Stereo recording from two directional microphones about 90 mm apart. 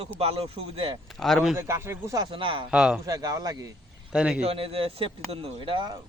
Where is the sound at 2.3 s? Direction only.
70° right (ahead or behind).